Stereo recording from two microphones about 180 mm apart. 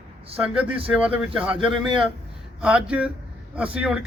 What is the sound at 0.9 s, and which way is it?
Speech, 5° right (ahead or behind).